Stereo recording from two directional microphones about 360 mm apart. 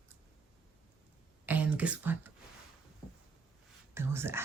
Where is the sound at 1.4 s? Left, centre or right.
Centre.